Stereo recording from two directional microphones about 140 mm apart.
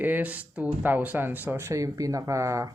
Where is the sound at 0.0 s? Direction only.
10° right (ahead or behind).